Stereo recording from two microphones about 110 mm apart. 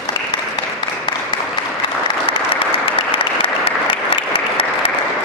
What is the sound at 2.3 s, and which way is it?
Applause, 50° left (ahead or behind).